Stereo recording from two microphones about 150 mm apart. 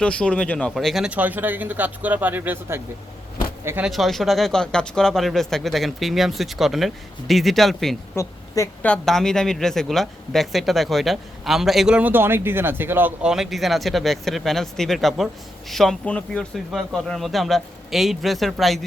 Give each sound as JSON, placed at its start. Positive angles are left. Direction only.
{"t": 0.0, "sound": "speech", "side_deg": 5}
{"t": 3.8, "sound": "speech", "side_deg": 0}
{"t": 8.1, "sound": "speech", "side_deg": 20}
{"t": 8.8, "sound": "speech", "side_deg": 5}